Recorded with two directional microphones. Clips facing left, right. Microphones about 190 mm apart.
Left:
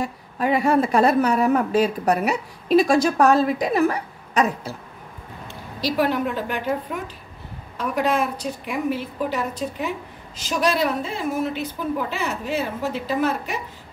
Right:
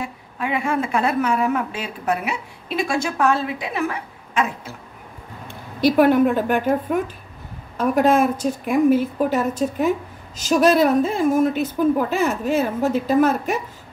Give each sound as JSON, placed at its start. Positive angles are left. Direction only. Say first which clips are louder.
{"t": 0.0, "sound": "a woman's voice", "louder": "left 3 dB", "side_deg": 40}
{"t": 5.5, "sound": "a woman's voice", "louder": "right 8 dB", "side_deg": -55}